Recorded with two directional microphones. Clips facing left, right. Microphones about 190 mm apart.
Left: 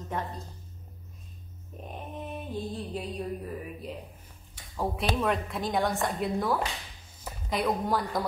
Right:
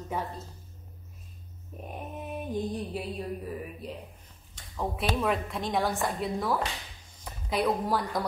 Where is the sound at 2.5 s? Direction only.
15° right (ahead or behind).